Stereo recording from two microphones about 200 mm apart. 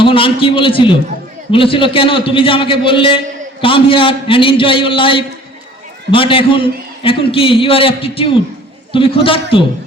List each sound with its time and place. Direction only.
0.0 s a man's voice: 25° left (ahead or behind)